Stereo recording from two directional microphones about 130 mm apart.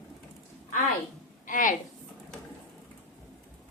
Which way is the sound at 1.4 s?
85° left.